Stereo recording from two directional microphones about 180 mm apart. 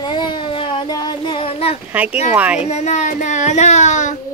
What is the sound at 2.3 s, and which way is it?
Speech, 5° right (ahead or behind).